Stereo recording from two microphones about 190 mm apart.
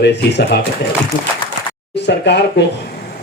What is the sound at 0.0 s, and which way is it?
Speech, 60° left (ahead or behind).